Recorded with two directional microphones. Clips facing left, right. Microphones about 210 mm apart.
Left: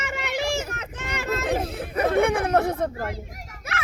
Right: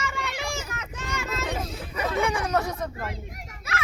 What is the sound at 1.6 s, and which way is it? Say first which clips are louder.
Chatter: left 6 dB; 60° left (ahead or behind).